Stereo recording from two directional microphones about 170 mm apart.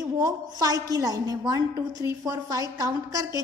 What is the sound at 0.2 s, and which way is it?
A woman's voice, 20° right (ahead or behind).